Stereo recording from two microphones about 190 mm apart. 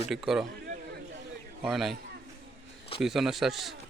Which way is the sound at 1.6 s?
Centre (ahead or behind).